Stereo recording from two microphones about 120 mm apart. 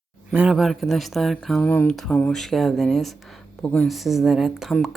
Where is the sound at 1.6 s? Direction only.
15° left (ahead or behind).